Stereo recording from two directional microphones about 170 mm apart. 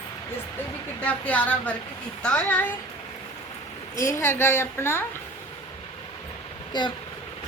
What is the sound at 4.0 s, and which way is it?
A woman's voice, 15° left (ahead or behind).